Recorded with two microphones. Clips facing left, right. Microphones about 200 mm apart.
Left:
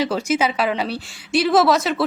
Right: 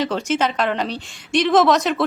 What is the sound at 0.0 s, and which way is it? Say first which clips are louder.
A woman's voice: left 1 dB; 10° left (ahead or behind).